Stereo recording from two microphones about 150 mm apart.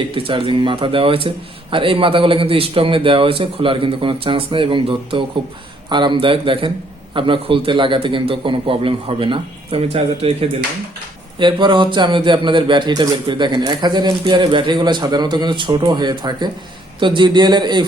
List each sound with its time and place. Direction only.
0.1 s a man's voice: 35° right (ahead or behind)
11.3 s a man's voice: 30° right (ahead or behind)